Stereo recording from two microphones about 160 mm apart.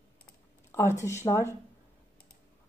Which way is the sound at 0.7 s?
15° left (ahead or behind).